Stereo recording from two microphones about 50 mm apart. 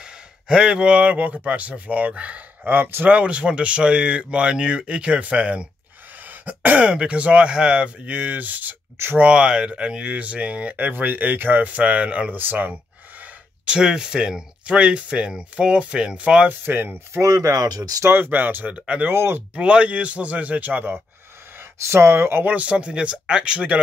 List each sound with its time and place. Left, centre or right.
0.0 s a sound: centre
1.1 s speech: right
2.6 s speech: right
3.1 s speech: right
9.2 s speech: centre; by 12.7 s right
13.7 s speech: centre
16.6 s speech: right
18.7 s speech: right
19.0 s speech: right
19.5 s speech: centre; by 21.0 s right
21.8 s speech: right
22.4 s speech: right